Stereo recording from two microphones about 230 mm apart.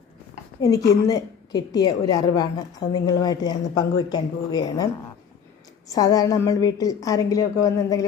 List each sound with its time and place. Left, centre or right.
0.6 s a woman's voice: centre
5.9 s a woman's voice: centre